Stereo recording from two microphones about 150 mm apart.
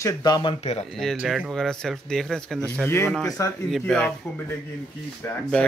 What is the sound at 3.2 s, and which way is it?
Speech, 20° left (ahead or behind).